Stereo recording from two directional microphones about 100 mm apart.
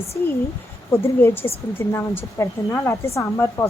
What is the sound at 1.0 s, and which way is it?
Speech, 25° left (ahead or behind).